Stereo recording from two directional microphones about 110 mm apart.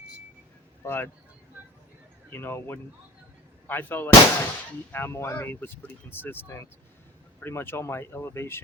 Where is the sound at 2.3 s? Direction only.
20° left (ahead or behind).